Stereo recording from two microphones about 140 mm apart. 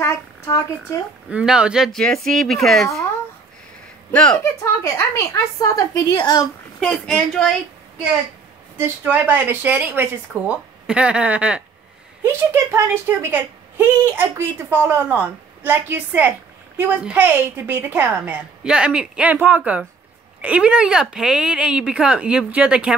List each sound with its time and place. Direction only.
0.0 s a child's voice: 20° left (ahead or behind)
1.3 s speech: 5° right (ahead or behind)
4.1 s speech: 10° left (ahead or behind)
4.8 s a woman's voice: 20° left (ahead or behind)
6.8 s speech: 5° left (ahead or behind)
8.7 s a woman's voice: 15° right (ahead or behind)